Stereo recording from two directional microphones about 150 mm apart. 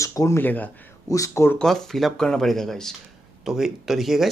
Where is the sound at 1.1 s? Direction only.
20° left (ahead or behind).